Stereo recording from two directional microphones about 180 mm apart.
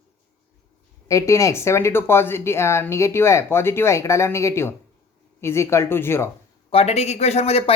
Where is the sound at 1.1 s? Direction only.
15° left (ahead or behind).